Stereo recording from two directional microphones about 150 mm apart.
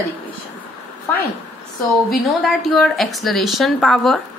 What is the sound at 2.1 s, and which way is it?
A woman's voice, centre (ahead or behind).